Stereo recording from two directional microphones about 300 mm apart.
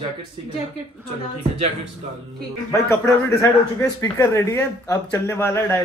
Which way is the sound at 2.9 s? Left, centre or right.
Centre.